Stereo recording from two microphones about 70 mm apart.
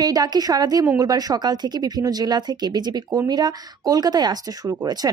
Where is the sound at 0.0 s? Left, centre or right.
Right.